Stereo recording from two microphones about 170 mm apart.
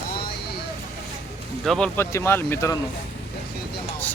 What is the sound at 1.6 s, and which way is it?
Speech, 5° left (ahead or behind).